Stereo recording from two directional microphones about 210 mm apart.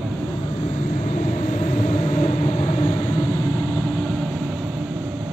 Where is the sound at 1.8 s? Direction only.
30° left (ahead or behind).